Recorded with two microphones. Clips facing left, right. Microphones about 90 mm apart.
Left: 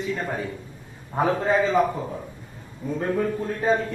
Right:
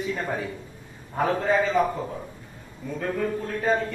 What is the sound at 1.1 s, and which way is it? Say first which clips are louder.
Speech: left 1 dB; 15° left (ahead or behind).